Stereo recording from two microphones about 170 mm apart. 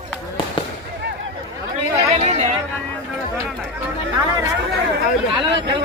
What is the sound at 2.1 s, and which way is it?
Chatter, 40° right (ahead or behind).